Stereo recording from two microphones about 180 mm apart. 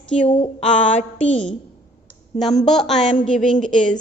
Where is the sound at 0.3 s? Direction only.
30° left (ahead or behind).